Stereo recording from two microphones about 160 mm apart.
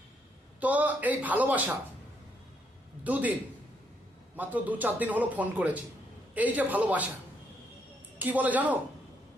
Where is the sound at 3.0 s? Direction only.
10° right (ahead or behind).